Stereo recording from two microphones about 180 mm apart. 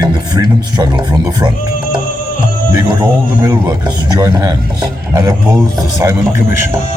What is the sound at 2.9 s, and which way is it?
A man's voice, 20° right (ahead or behind).